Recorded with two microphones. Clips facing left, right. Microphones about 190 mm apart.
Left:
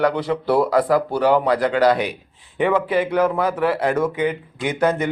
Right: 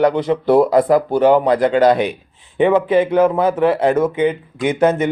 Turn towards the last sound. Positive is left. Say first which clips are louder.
# right 5 dB
turn(degrees=-25)  # may be behind; listen again after turning